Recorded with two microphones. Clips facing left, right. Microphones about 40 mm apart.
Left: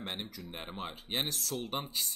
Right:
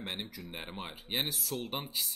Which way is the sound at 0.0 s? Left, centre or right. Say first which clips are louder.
Even; centre.